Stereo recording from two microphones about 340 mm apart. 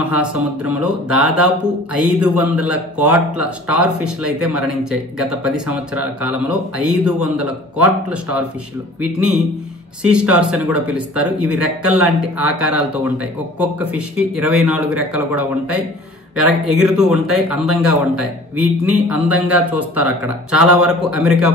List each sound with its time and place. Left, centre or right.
0.1 s speech: centre
10.0 s speech: centre